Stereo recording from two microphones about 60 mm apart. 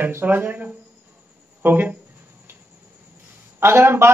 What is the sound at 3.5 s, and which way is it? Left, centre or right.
Speech, right.